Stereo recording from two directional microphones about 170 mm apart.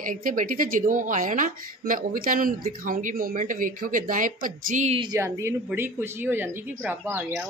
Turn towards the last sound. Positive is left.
turn(degrees=-15)  # may be behind; listen again after turning